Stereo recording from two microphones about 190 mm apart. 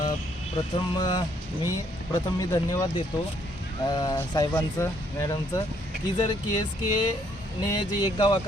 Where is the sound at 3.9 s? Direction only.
20° left (ahead or behind).